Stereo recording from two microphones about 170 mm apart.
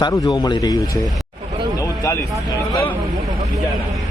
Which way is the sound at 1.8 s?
20° left (ahead or behind).